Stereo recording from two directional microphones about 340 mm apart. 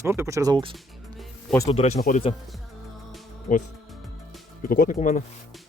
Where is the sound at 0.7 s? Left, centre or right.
Centre.